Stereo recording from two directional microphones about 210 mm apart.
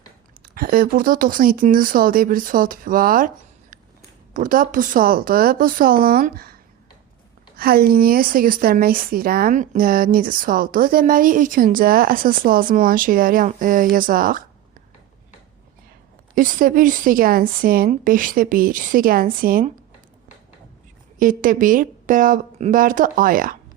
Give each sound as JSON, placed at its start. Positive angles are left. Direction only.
{"t": 0.5, "sound": "a woman's voice", "side_deg": -45}
{"t": 16.3, "sound": "a woman's voice", "side_deg": -40}
{"t": 21.2, "sound": "a woman's voice", "side_deg": -40}